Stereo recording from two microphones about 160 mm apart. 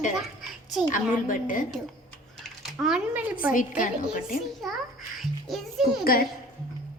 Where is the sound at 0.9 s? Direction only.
55° left (ahead or behind).